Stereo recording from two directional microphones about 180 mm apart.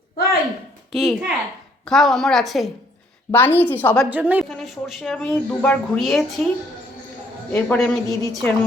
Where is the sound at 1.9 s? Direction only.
Centre (ahead or behind).